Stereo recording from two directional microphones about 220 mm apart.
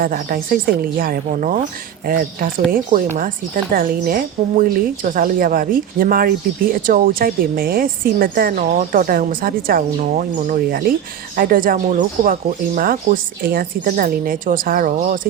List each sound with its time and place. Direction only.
0.0 s a woman's voice: 40° right (ahead or behind)